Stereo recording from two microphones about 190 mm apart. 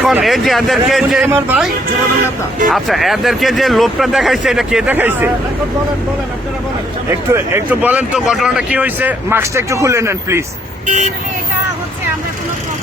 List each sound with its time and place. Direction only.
0.0 s speech: 5° right (ahead or behind)
7.1 s speech: 15° right (ahead or behind)
10.8 s speech: 40° right (ahead or behind)